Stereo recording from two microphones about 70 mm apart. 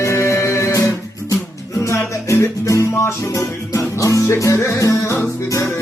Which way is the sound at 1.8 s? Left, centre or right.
Left.